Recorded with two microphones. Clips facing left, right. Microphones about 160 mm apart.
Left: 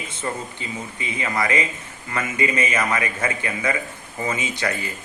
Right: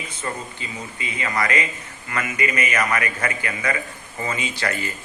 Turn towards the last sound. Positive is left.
turn(degrees=20)  # may be behind; listen again after turning